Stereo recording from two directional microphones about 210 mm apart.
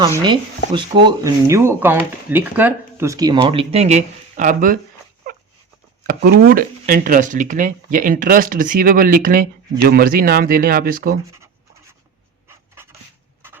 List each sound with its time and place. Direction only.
0.2 s speech: 20° right (ahead or behind); by 4.8 s 40° right (ahead or behind)
6.0 s speech: 45° right (ahead or behind)
12.5 s a sound: 10° right (ahead or behind)